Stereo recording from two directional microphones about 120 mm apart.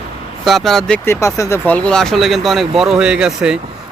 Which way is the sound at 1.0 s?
25° left (ahead or behind).